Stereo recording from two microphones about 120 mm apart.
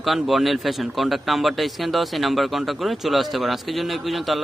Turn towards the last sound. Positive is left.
turn(degrees=0)  # may be behind; listen again after turning